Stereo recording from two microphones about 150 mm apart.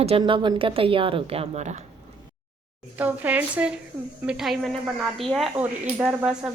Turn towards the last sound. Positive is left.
turn(degrees=-5)  # may be behind; listen again after turning